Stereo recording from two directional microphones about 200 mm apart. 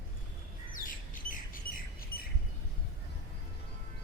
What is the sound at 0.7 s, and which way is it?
Bird, 45° left (ahead or behind).